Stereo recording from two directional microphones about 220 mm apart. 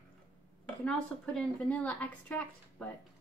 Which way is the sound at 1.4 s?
5° left (ahead or behind).